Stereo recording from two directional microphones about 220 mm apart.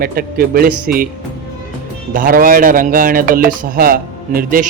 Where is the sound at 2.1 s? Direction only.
40° right (ahead or behind).